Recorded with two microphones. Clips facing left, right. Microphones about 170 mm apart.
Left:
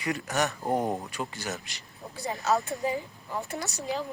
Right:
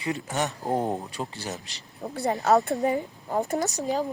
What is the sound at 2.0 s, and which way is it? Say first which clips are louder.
Speech: right 6 dB; 60° right (ahead or behind).